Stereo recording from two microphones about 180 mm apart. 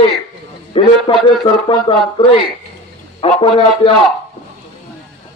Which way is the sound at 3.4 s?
30° left (ahead or behind).